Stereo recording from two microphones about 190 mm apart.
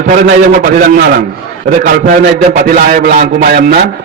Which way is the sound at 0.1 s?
45° right (ahead or behind).